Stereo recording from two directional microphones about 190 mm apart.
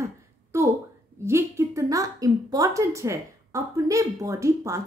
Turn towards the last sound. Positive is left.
turn(degrees=-15)  # may be behind; listen again after turning